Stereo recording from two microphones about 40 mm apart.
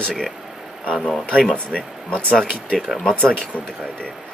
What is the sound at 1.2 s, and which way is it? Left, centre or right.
Speech, left.